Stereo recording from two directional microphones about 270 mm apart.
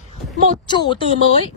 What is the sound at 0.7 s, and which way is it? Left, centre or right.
Speech, centre.